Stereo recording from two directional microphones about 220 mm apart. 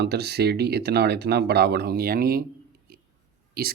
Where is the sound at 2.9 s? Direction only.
45° right (ahead or behind).